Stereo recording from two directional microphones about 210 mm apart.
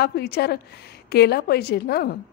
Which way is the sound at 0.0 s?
50° left (ahead or behind).